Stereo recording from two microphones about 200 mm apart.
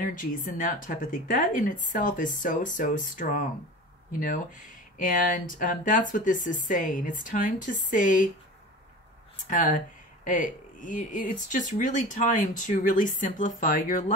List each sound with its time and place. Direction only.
0.0 s speech: 40° left (ahead or behind)
10.2 s speech: 40° left (ahead or behind)